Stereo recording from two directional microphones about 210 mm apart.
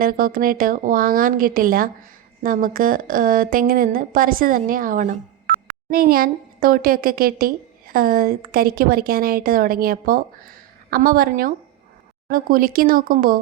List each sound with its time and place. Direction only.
0.0 s a woman's voice: 40° right (ahead or behind)